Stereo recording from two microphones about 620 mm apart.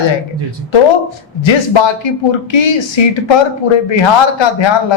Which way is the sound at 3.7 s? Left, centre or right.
Left.